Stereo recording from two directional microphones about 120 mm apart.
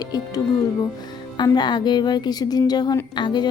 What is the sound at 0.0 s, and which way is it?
Speech, 35° left (ahead or behind).